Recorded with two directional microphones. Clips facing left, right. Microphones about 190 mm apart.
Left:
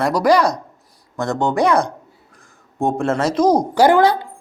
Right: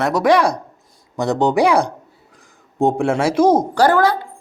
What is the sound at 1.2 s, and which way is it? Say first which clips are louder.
Speech: right 3 dB; 15° right (ahead or behind).